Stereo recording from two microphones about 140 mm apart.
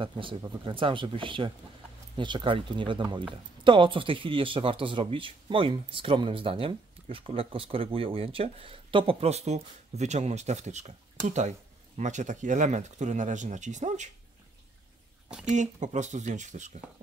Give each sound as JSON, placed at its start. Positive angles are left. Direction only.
{"t": 0.0, "sound": "speech", "side_deg": -35}
{"t": 15.4, "sound": "speech", "side_deg": -60}